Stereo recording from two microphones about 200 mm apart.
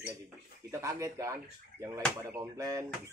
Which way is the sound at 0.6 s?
15° right (ahead or behind).